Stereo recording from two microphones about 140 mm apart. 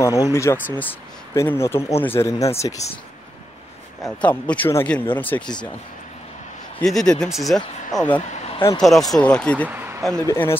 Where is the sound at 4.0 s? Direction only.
10° left (ahead or behind).